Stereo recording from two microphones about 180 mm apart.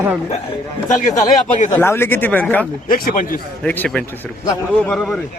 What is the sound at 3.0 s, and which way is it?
Speech, 55° left (ahead or behind).